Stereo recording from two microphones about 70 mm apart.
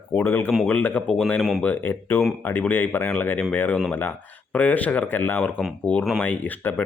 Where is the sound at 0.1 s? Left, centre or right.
Left.